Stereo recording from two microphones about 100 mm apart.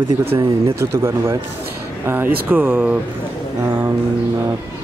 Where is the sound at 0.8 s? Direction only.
25° right (ahead or behind); by 2.9 s 10° right (ahead or behind).